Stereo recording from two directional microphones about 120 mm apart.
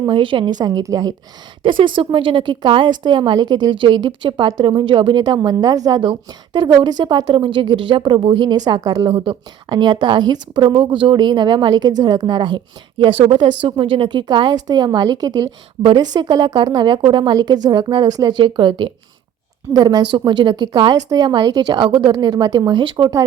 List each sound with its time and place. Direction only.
0.0 s a woman's voice: 45° right (ahead or behind)
0.6 s a woman's voice: 30° right (ahead or behind)
1.6 s a woman's voice: 45° right (ahead or behind)
19.7 s a woman's voice: 35° right (ahead or behind)